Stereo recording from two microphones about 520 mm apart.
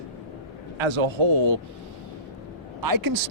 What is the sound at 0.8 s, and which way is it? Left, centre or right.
Speech, right.